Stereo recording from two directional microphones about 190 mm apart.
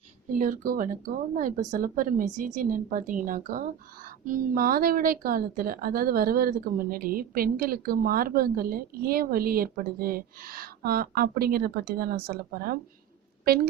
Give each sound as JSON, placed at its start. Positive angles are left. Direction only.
{"t": 0.3, "sound": "a woman's voice", "side_deg": -45}